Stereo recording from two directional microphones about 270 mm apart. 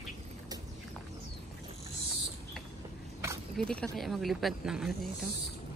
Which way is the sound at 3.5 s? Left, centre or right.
Centre.